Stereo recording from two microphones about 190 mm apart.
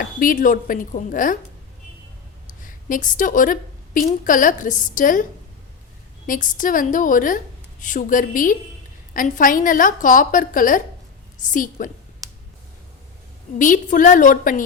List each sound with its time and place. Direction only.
0.2 s a woman's voice: 45° left (ahead or behind)
2.6 s a woman's voice: 45° left (ahead or behind)
6.2 s a woman's voice: 45° left (ahead or behind)
13.6 s a woman's voice: 45° left (ahead or behind)